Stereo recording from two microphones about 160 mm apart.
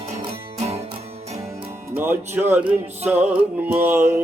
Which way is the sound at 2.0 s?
15° right (ahead or behind).